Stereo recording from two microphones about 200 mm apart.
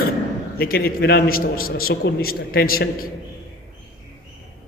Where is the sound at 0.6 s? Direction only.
50° left (ahead or behind).